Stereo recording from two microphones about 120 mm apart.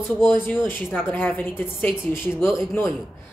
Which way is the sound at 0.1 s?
15° left (ahead or behind).